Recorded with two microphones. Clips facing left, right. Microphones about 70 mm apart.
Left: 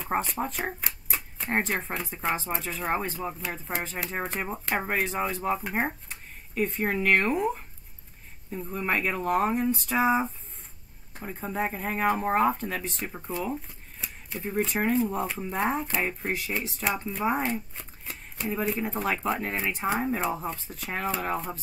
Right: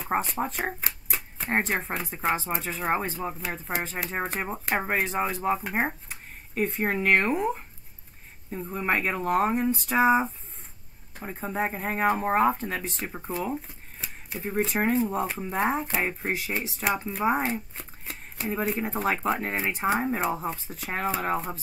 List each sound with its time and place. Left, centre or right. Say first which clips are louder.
0.0 s speech: right 1 dB; centre
2.4 s speech: right 1 dB; centre
2.9 s speech: right 2 dB; centre
11.7 s speech: right 1 dB; centre
12.1 s speech: right 1 dB; centre